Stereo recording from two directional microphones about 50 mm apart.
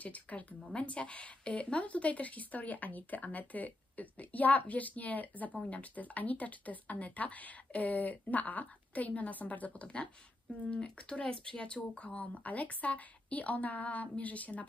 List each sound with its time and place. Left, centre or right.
0.0 s speech: left